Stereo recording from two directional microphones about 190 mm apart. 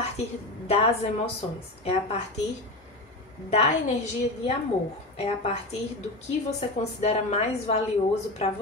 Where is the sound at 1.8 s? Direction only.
35° left (ahead or behind).